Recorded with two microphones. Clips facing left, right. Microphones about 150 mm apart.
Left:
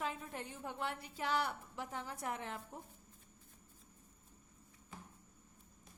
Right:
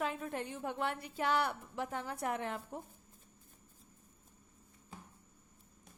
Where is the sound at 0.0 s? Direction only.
65° right (ahead or behind).